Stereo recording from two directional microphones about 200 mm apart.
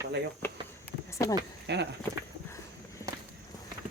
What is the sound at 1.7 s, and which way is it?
Speech, 55° right (ahead or behind).